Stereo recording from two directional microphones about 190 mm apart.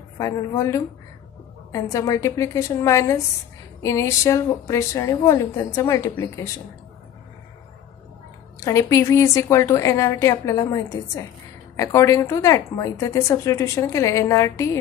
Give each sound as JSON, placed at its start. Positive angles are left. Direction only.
{"t": 0.2, "sound": "speech", "side_deg": 15}
{"t": 8.5, "sound": "speech", "side_deg": 15}